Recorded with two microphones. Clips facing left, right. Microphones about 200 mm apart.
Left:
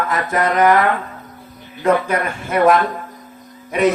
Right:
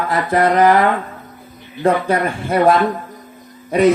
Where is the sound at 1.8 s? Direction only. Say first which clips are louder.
Right 1 dB; 35° right (ahead or behind).